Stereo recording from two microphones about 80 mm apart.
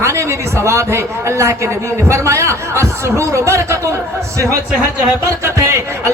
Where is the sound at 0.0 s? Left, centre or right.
Right.